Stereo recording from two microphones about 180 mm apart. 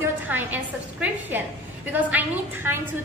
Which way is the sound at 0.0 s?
10° right (ahead or behind).